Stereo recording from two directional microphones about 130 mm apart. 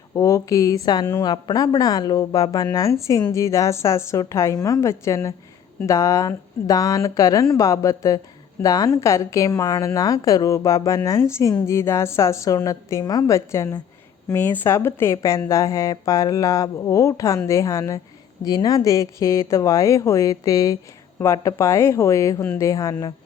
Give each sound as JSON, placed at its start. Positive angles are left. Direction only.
{"t": 0.1, "sound": "a woman's voice", "side_deg": 25}